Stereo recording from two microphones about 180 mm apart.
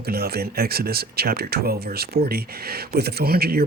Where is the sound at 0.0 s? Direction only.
60° right (ahead or behind).